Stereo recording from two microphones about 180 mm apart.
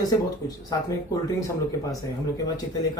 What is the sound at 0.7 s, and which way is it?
Speech, 20° left (ahead or behind).